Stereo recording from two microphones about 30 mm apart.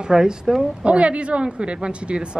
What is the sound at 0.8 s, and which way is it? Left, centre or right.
Speech, right.